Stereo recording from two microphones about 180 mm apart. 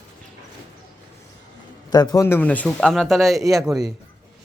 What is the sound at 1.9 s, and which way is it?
A man's voice, 20° left (ahead or behind).